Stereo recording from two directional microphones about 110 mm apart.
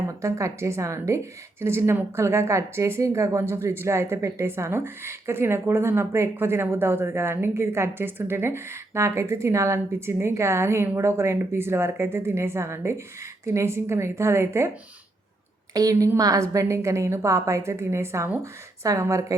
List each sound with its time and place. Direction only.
0.2 s a woman's voice: 30° right (ahead or behind)
15.7 s a woman's voice: 35° right (ahead or behind)